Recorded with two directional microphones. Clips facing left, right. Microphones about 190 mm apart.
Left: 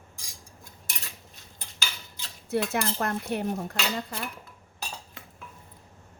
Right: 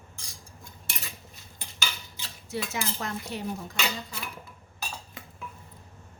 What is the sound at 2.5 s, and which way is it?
Speech, 55° left (ahead or behind).